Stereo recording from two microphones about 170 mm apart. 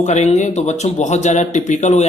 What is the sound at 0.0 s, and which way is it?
A man's voice, 45° left (ahead or behind).